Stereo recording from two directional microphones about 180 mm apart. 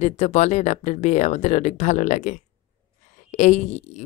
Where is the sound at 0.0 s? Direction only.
40° left (ahead or behind).